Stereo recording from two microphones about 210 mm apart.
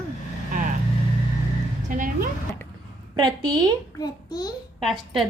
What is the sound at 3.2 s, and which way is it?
Speech, 20° right (ahead or behind).